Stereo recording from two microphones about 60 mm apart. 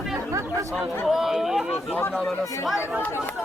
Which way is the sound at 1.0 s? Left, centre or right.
Centre.